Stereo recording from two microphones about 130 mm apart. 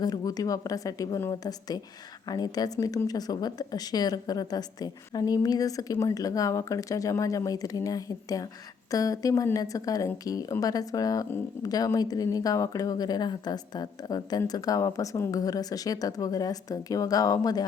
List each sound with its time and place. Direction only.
0.0 s a woman's voice: 30° left (ahead or behind)